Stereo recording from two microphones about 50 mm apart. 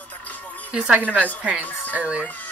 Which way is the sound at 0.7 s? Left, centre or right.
Centre.